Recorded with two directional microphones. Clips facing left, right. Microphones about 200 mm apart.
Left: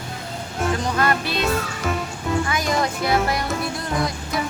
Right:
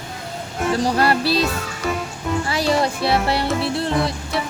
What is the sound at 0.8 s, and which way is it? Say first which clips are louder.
Music: right 7 dB; 35° right (ahead or behind).